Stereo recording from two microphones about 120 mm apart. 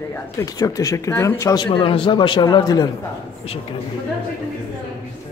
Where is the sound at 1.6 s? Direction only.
45° left (ahead or behind).